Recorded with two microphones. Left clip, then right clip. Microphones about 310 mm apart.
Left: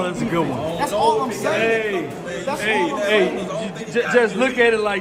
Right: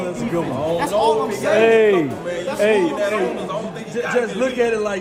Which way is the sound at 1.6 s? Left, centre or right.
Centre.